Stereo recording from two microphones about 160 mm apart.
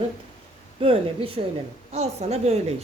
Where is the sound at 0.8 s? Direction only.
35° right (ahead or behind).